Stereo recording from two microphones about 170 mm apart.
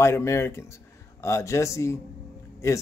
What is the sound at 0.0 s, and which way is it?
Speech, 15° left (ahead or behind).